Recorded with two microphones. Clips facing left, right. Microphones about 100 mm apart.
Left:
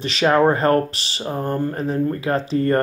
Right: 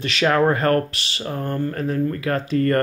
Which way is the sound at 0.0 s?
30° left (ahead or behind).